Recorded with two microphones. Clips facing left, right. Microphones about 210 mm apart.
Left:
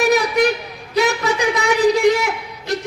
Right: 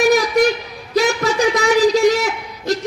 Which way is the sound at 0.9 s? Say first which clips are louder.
Right 2 dB; 60° left (ahead or behind).